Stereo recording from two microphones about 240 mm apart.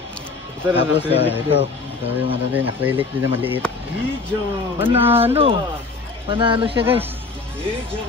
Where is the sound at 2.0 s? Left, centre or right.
Right.